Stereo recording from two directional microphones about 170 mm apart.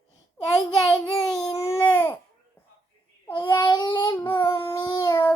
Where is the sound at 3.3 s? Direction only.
25° left (ahead or behind).